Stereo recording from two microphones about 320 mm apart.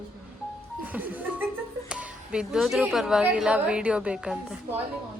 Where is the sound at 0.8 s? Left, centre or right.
Centre.